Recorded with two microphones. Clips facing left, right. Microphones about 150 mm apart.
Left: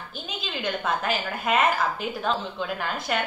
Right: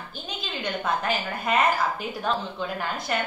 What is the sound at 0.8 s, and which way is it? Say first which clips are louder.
A woman's voice: right 1 dB; centre (ahead or behind).